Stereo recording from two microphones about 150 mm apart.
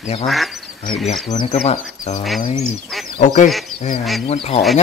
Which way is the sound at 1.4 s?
45° left (ahead or behind).